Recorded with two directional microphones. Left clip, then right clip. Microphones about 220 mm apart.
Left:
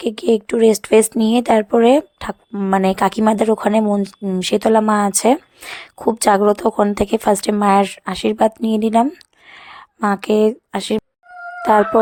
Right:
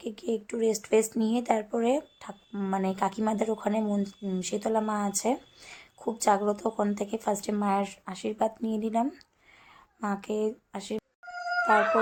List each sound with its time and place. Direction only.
0.0 s speech: 45° left (ahead or behind)